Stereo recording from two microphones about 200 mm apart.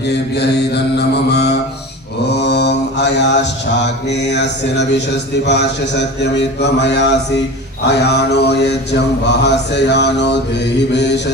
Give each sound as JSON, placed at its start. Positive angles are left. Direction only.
{"t": 0.3, "sound": "mantra", "side_deg": 55}